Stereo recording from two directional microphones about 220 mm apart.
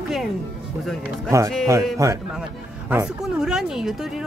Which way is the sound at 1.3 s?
15° right (ahead or behind).